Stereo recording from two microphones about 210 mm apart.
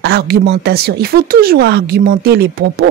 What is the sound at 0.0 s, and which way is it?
Speech, 50° right (ahead or behind).